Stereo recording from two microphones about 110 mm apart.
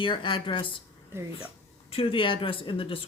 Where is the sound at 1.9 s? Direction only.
55° left (ahead or behind).